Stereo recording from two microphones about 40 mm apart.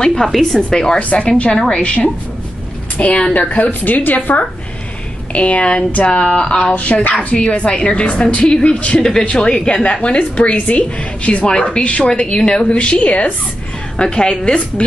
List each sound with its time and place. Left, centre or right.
0.0 s a woman's voice: centre; by 3.6 s left
3.8 s a woman's voice: left
5.3 s speech: left
6.7 s speech: left
8.5 s speech: centre
8.7 s speech: left
12.1 s speech: left